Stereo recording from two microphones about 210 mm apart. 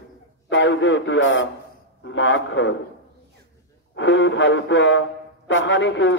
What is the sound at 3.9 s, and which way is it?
Speech, 60° left (ahead or behind).